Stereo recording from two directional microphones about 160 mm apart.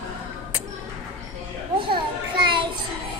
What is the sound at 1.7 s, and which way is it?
Children playing, 30° right (ahead or behind).